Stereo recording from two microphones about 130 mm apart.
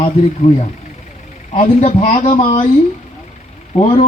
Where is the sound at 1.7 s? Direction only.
50° left (ahead or behind).